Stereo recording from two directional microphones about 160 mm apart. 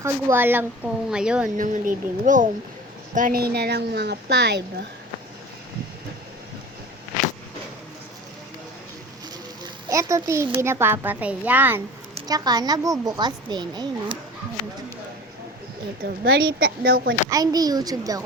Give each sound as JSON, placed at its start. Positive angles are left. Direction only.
{"t": 0.0, "sound": "a child's voice", "side_deg": -15}
{"t": 1.5, "sound": "speech", "side_deg": -55}
{"t": 9.9, "sound": "a child's voice", "side_deg": -20}
{"t": 12.3, "sound": "speech", "side_deg": -25}
{"t": 16.0, "sound": "a woman's voice", "side_deg": -75}
{"t": 17.2, "sound": "speech", "side_deg": -20}